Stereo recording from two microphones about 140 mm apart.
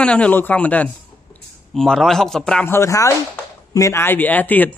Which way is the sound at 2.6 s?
20° left (ahead or behind).